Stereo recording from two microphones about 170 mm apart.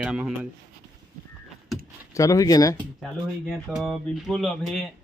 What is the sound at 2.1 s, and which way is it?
Speech, 20° left (ahead or behind).